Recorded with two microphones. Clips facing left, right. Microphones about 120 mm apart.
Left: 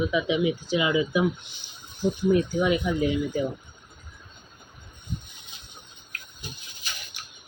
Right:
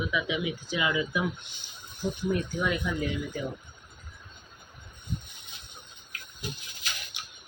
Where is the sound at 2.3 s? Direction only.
15° left (ahead or behind).